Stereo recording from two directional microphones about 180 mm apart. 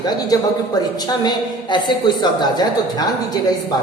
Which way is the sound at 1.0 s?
25° left (ahead or behind).